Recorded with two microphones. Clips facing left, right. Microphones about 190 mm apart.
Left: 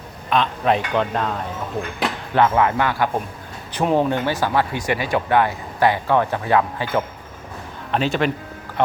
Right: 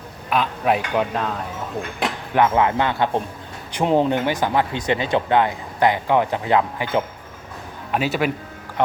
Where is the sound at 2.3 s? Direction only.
20° right (ahead or behind).